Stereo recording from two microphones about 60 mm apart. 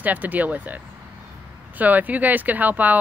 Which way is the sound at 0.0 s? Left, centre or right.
Right.